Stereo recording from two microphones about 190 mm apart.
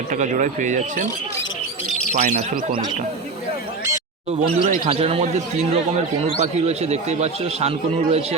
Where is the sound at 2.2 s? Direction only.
40° right (ahead or behind).